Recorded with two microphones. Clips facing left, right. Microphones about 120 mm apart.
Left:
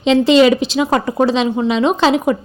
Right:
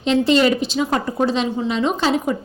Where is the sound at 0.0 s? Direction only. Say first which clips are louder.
Left 5 dB; 90° left.